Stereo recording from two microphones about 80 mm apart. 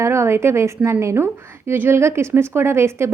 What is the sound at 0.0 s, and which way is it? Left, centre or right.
A woman's voice, right.